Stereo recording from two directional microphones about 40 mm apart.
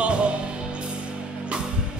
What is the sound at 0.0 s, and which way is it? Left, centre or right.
Music, right.